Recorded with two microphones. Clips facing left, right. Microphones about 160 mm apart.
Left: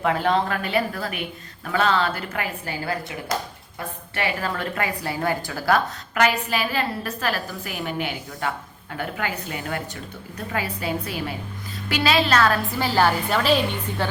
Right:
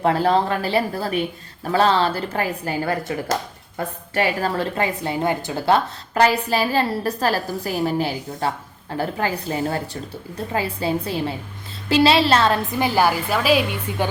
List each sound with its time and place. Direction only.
0.0 s a woman's voice: 35° right (ahead or behind); by 14.1 s 10° right (ahead or behind)